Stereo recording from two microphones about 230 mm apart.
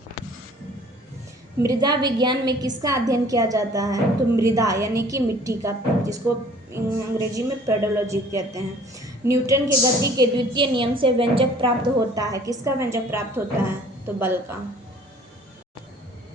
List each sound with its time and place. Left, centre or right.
1.6 s a woman's voice: centre